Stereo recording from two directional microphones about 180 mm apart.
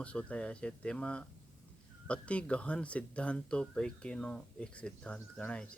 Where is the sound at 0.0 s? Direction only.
5° left (ahead or behind).